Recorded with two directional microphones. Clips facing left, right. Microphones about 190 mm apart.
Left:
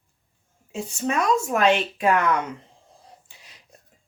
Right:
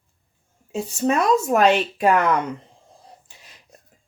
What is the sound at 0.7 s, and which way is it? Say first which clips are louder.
Speech: right 5 dB; 40° right (ahead or behind).